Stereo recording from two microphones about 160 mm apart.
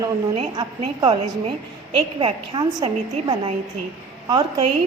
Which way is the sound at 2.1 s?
30° right (ahead or behind).